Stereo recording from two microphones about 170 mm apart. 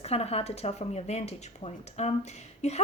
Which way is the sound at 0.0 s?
35° left (ahead or behind).